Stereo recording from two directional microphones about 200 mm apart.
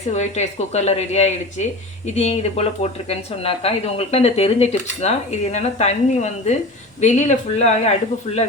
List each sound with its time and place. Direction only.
0.1 s speech: 35° left (ahead or behind)